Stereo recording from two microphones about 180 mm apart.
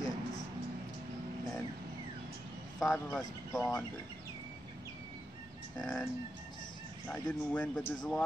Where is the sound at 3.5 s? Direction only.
15° left (ahead or behind).